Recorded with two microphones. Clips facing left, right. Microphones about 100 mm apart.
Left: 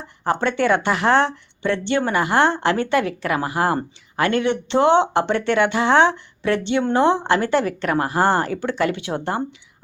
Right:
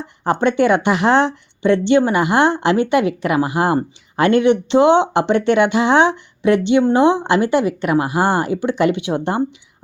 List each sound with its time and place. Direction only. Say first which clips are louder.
0.3 s speech: right 4 dB; 20° right (ahead or behind)